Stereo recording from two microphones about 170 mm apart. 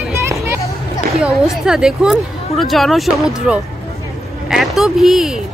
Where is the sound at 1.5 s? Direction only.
5° right (ahead or behind).